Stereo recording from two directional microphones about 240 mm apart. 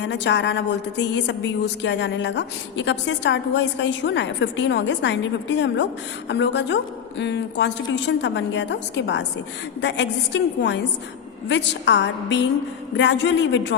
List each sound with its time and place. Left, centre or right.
0.0 s a woman's voice: left